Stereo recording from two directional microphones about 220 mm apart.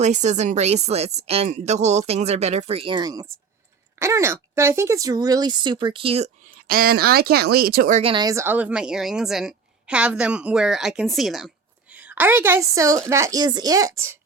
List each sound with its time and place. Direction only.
0.0 s speech: 30° right (ahead or behind)
6.7 s speech: 45° right (ahead or behind); by 14.2 s 15° right (ahead or behind)